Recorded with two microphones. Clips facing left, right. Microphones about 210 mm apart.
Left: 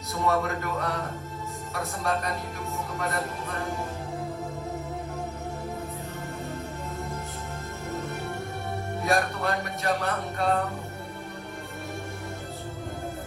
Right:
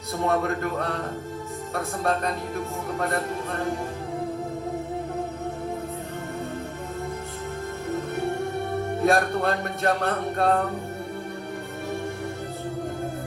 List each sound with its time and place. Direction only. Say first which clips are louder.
0.3 s music: right 2 dB; 55° right (ahead or behind)
9.0 s music: right 4 dB; 55° right (ahead or behind)